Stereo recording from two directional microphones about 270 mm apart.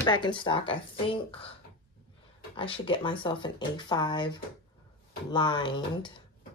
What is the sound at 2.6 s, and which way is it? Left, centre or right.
Speech, centre.